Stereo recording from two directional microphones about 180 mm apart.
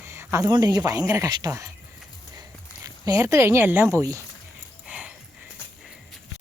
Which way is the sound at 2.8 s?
20° right (ahead or behind).